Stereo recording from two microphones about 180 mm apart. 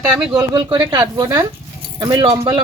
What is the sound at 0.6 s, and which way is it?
Speech, 25° right (ahead or behind).